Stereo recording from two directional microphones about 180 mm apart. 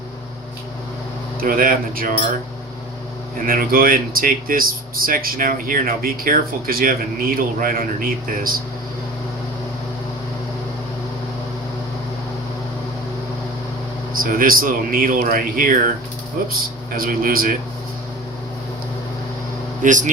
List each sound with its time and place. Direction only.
1.4 s speech: 50° right (ahead or behind)
3.3 s speech: 55° right (ahead or behind)
14.2 s speech: 50° right (ahead or behind)
19.8 s speech: 45° right (ahead or behind)